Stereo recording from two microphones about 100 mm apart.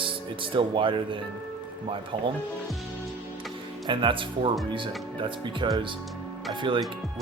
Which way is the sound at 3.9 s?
60° right (ahead or behind).